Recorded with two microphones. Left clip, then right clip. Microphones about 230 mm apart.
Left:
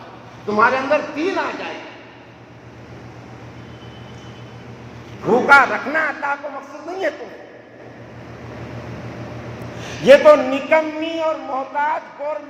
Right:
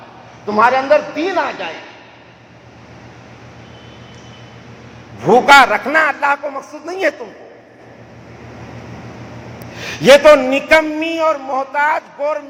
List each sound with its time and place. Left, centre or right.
0.4 s a man's voice: right
5.3 s a man's voice: right
10.1 s a man's voice: right